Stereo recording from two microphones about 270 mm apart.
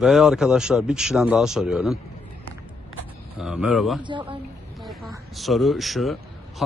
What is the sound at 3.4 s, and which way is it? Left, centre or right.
Speech, centre.